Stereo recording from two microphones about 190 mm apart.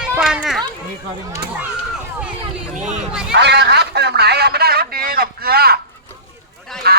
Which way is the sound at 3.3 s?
65° right (ahead or behind).